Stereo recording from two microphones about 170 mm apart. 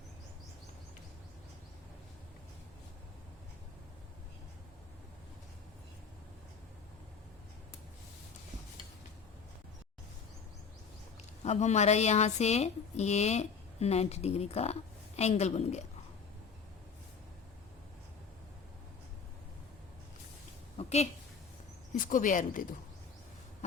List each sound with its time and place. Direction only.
11.4 s a woman's voice: 40° left (ahead or behind)
20.7 s a sound: 40° left (ahead or behind)
21.9 s speech: 50° left (ahead or behind)